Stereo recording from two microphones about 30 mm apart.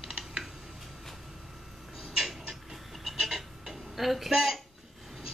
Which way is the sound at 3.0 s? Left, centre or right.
Centre.